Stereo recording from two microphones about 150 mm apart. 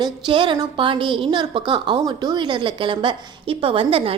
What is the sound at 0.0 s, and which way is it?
A woman's voice, 35° right (ahead or behind).